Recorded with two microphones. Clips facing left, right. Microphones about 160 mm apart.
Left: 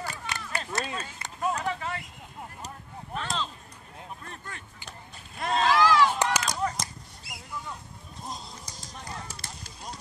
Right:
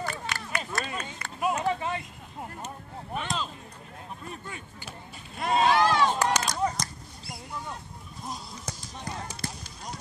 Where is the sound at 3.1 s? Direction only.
10° right (ahead or behind).